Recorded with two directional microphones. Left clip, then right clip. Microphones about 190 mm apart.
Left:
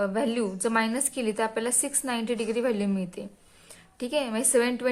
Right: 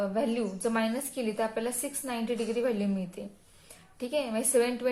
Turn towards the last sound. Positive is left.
turn(degrees=40)  # may be behind; listen again after turning